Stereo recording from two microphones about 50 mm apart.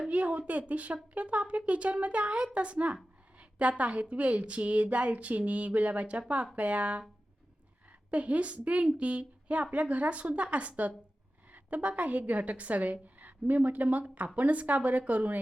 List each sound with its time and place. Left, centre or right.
0.1 s speech: right
8.1 s a woman's voice: right